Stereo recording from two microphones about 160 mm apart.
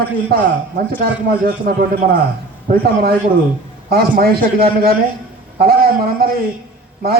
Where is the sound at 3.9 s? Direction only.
75° right (ahead or behind).